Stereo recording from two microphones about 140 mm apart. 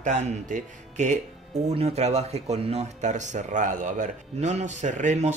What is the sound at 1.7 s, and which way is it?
Speech, 50° right (ahead or behind).